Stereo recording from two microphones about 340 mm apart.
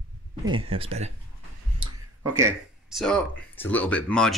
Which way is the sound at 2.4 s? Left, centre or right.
Centre.